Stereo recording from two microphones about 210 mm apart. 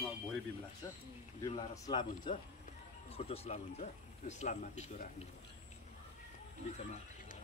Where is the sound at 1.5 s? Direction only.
20° left (ahead or behind).